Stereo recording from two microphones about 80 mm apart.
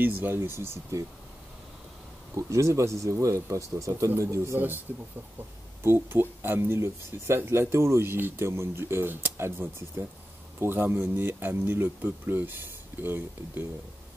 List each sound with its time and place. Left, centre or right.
0.0 s speech: right
2.3 s speech: right
5.8 s speech: right